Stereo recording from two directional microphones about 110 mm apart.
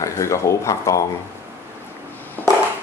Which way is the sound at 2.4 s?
15° left (ahead or behind).